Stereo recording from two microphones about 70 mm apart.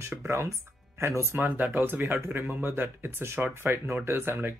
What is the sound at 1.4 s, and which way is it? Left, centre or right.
Speech, right.